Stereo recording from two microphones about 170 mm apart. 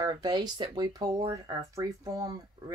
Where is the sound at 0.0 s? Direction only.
25° right (ahead or behind).